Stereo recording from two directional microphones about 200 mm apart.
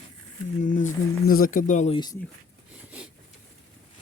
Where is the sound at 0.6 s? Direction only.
40° left (ahead or behind).